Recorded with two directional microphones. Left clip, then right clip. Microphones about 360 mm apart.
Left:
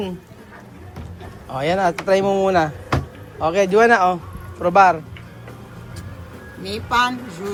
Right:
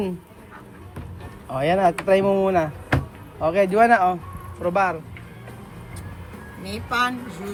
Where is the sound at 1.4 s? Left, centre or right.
Centre.